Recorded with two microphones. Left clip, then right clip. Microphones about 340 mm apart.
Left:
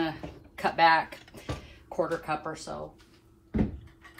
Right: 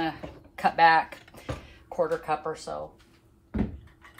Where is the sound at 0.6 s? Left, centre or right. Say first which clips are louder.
Right 2 dB; right.